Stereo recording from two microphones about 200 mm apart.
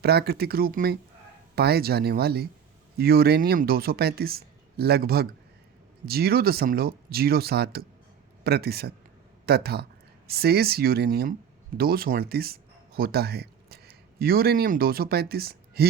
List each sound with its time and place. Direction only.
0.0 s speech: 50° right (ahead or behind)